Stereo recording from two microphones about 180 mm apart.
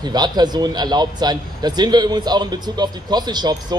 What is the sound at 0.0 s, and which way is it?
A man's voice, 25° right (ahead or behind).